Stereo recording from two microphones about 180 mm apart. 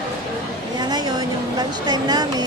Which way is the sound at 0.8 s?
20° right (ahead or behind).